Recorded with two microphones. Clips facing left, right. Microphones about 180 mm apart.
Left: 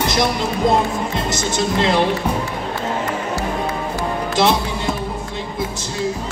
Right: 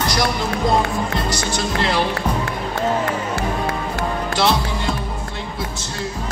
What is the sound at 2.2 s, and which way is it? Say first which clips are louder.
Speech: left 1 dB; 10° left (ahead or behind).